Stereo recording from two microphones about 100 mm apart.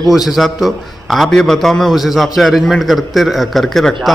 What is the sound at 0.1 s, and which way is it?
A man's voice, 5° right (ahead or behind).